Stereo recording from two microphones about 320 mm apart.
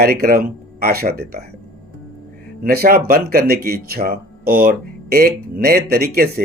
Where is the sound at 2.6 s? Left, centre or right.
Right.